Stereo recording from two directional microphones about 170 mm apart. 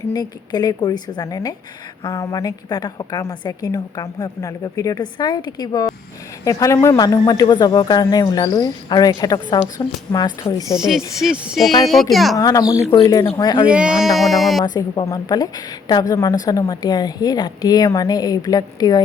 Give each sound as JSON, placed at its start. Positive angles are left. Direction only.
{"t": 0.1, "sound": "speech", "side_deg": 25}
{"t": 10.8, "sound": "speech", "side_deg": 0}
{"t": 12.4, "sound": "speech", "side_deg": 20}
{"t": 13.7, "sound": "speech", "side_deg": -5}
{"t": 14.6, "sound": "speech", "side_deg": 25}